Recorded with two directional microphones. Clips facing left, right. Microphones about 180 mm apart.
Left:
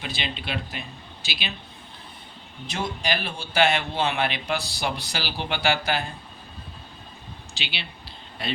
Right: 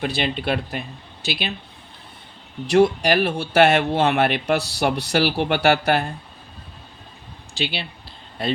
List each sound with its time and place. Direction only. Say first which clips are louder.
0.0 s speech: right 9 dB; 50° right (ahead or behind)
2.7 s speech: right 13 dB; 65° right (ahead or behind)
7.5 s speech: right 10 dB; 50° right (ahead or behind)